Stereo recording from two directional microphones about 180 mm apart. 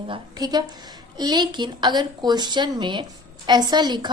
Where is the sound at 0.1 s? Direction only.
25° right (ahead or behind).